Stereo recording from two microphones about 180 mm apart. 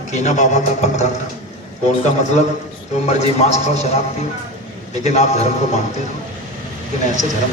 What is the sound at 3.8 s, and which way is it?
A man's voice, 40° left (ahead or behind).